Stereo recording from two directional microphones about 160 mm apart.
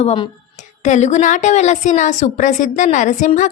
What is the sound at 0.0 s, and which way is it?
A woman's voice, 35° left (ahead or behind).